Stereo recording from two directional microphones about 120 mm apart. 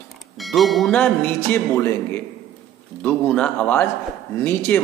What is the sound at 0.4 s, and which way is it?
Speech, centre (ahead or behind).